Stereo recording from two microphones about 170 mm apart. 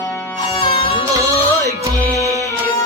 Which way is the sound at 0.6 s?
30° left (ahead or behind).